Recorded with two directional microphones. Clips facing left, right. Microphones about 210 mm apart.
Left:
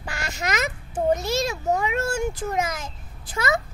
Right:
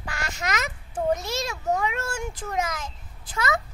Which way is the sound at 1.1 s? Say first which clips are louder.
Left 6 dB; centre (ahead or behind).